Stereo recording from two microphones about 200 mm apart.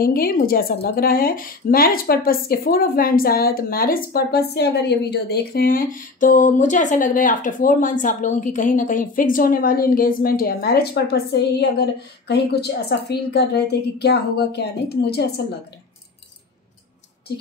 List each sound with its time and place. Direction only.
0.0 s a woman's voice: 50° left (ahead or behind)